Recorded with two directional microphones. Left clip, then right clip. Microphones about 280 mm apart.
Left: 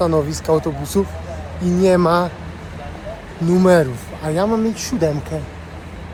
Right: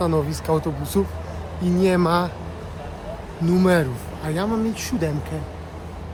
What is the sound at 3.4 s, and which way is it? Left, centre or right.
Speech, centre.